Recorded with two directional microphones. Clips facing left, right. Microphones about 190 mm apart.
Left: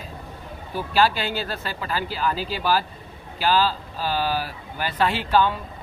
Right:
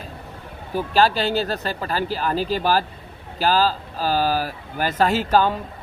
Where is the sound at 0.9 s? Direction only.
40° right (ahead or behind).